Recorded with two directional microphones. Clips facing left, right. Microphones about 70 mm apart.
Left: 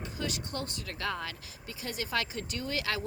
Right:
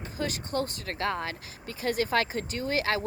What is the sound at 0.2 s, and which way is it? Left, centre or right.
Speech, right.